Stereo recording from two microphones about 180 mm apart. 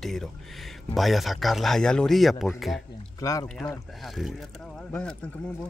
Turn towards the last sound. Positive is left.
turn(degrees=5)  # may be behind; listen again after turning